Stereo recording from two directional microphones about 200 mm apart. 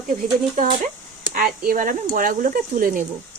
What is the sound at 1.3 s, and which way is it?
Speech, 45° right (ahead or behind).